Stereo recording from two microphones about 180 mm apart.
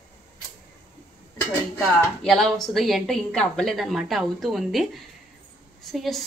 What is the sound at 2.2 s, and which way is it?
A woman's voice, centre (ahead or behind).